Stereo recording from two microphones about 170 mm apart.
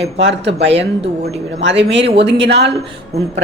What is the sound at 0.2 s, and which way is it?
Speech, 90° right.